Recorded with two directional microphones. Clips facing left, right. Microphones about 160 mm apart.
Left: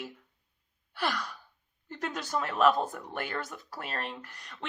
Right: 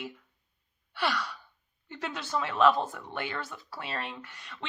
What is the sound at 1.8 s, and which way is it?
Speech, 40° left (ahead or behind).